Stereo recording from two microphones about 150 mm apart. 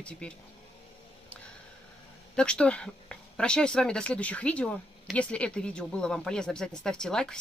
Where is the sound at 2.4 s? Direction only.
5° left (ahead or behind).